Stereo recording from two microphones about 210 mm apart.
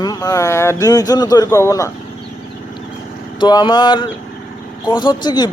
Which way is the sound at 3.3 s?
20° left (ahead or behind).